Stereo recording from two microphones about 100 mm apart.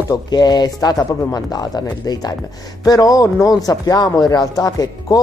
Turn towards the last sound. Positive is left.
turn(degrees=35)  # may be behind; listen again after turning